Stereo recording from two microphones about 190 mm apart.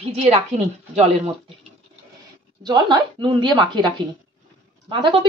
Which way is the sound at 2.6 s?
20° right (ahead or behind).